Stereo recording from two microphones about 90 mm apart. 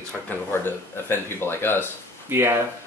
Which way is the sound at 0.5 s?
25° left (ahead or behind).